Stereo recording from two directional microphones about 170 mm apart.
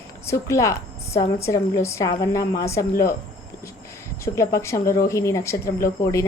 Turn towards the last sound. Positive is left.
turn(degrees=15)  # may be behind; listen again after turning